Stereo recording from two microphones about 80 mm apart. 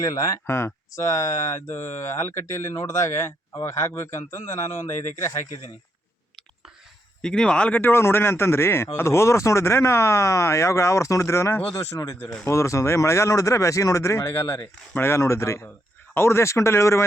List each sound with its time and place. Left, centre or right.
0.0 s speech: left
1.0 s speech: left
7.2 s speech: centre
7.8 s speech: left
14.9 s speech: left